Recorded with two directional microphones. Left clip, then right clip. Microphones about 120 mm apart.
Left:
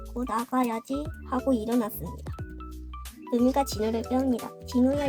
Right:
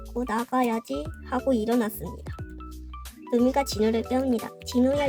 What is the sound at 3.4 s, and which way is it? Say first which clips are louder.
Speech: right 1 dB; 20° right (ahead or behind).